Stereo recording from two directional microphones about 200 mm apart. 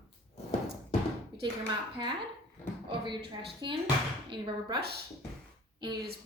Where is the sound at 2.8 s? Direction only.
25° right (ahead or behind).